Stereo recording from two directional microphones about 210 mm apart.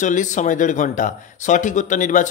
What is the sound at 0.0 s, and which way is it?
A man's voice, 35° left (ahead or behind).